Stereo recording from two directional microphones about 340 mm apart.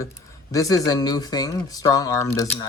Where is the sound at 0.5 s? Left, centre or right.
Centre.